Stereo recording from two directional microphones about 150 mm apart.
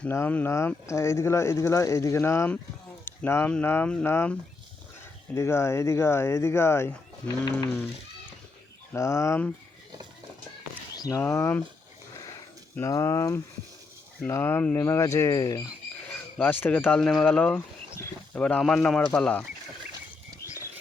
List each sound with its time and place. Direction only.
0.0 s speech: 15° left (ahead or behind)
8.9 s speech: 20° left (ahead or behind)
10.9 s a sound: 25° left (ahead or behind)
11.3 s speech: 15° left (ahead or behind)
12.7 s speech: 20° left (ahead or behind)
16.4 s speech: 10° left (ahead or behind)